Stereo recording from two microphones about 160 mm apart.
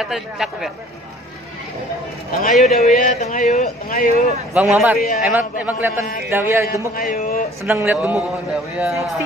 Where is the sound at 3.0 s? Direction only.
50° left (ahead or behind).